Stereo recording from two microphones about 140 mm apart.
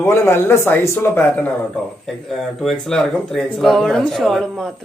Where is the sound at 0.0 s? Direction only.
20° left (ahead or behind).